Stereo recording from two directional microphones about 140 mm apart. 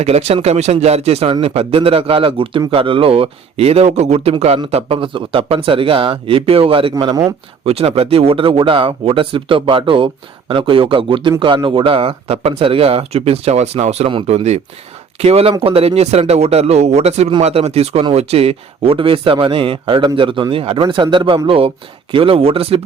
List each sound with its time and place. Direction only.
0.0 s speech: 50° right (ahead or behind)